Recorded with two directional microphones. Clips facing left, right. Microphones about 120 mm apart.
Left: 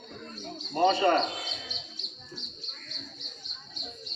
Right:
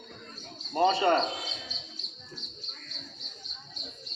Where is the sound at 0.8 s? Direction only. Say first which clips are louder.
Left 1 dB; 35° right (ahead or behind).